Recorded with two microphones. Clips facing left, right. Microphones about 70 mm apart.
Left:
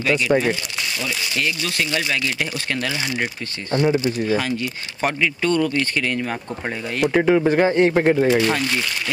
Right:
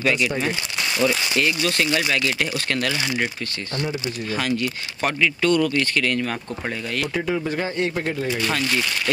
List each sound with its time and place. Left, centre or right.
0.0 s speech: centre
1.4 s speech: centre
2.5 s speech: centre
3.7 s speech: left
4.3 s speech: centre
5.5 s speech: left
7.2 s speech: left
8.5 s speech: centre